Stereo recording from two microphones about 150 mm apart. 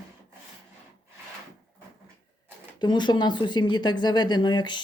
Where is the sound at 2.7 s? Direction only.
30° left (ahead or behind).